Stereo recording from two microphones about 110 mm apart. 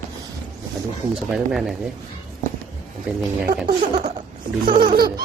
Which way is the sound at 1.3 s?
5° right (ahead or behind).